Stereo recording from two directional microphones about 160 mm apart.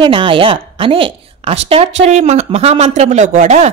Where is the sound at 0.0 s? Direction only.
35° right (ahead or behind).